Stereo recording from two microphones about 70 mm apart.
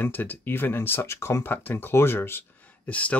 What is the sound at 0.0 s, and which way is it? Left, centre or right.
Speech, left.